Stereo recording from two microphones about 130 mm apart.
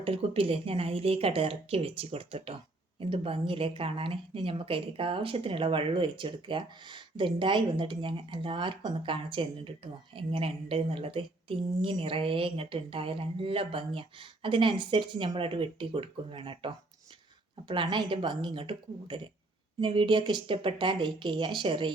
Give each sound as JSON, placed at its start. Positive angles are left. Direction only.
{"t": 0.0, "sound": "speech", "side_deg": -45}